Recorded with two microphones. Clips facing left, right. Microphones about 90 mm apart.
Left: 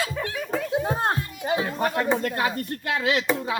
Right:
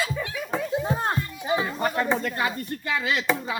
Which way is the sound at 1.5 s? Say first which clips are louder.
Left 1 dB; 65° left (ahead or behind).